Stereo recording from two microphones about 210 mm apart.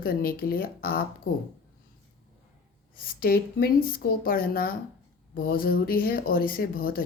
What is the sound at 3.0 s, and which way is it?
Speech, 45° left (ahead or behind).